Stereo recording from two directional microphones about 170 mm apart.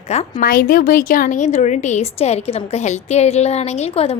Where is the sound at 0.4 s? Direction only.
55° left (ahead or behind).